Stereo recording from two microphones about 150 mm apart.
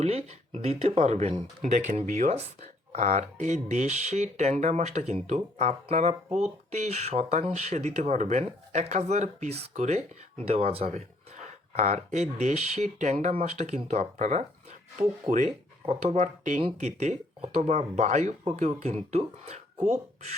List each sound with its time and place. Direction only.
0.0 s speech: 45° right (ahead or behind)